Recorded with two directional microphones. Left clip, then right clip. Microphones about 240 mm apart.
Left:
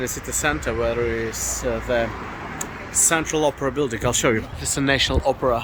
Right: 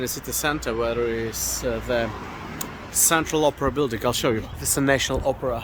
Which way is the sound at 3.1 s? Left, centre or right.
Right.